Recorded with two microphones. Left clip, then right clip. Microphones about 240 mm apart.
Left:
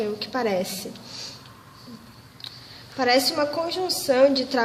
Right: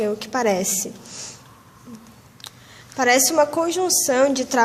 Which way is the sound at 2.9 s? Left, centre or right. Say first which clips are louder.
Right 4 dB; right.